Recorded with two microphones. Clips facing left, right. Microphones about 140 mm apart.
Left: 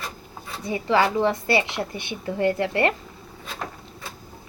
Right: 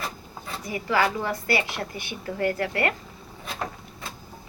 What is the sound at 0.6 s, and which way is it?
Speech, 25° left (ahead or behind).